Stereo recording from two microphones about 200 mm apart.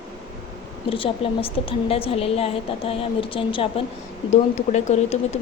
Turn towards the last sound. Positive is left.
turn(degrees=35)  # may be behind; listen again after turning